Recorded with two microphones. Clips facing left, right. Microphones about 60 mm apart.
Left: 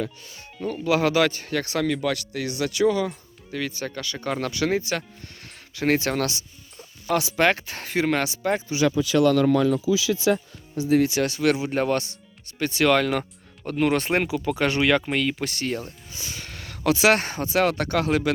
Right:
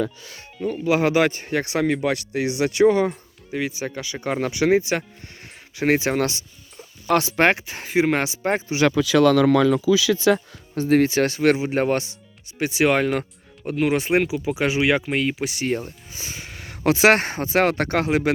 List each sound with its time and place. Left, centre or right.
0.9 s a man's voice: right
3.5 s speech: centre
7.2 s speech: right
7.5 s a man's voice: centre
8.4 s speech: right
8.9 s speech: right
10.8 s speech: right
11.1 s a man's voice: right
12.5 s speech: centre
15.6 s a man's voice: right
16.4 s a sound: centre
16.8 s speech: right